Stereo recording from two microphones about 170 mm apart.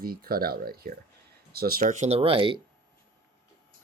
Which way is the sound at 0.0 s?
60° right (ahead or behind).